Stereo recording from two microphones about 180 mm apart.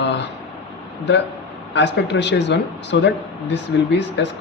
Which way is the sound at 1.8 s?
75° left (ahead or behind).